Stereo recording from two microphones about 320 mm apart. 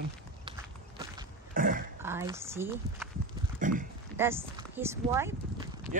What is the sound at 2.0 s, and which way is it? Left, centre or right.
Speech, centre.